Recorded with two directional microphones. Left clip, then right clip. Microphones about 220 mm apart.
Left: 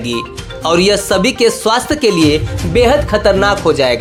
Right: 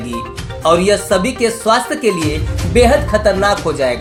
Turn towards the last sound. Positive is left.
turn(degrees=40)  # may be behind; listen again after turning